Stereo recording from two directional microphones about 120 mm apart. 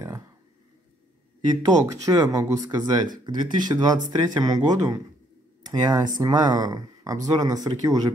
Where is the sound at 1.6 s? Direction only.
35° right (ahead or behind).